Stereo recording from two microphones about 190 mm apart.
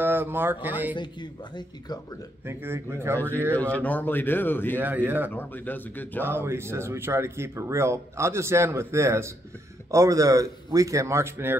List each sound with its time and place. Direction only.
0.0 s speech: 10° right (ahead or behind)
0.9 s speech: 25° left (ahead or behind)
2.4 s speech: 10° right (ahead or behind)
3.2 s speech: 10° left (ahead or behind)
4.7 s speech: 10° right (ahead or behind)
5.3 s speech: 10° left (ahead or behind)
6.2 s speech: 10° right (ahead or behind)